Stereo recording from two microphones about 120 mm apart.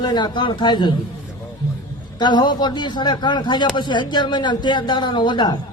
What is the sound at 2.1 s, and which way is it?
A man's voice, 40° left (ahead or behind).